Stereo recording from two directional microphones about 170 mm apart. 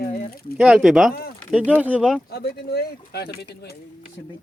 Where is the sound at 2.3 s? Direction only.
70° left (ahead or behind).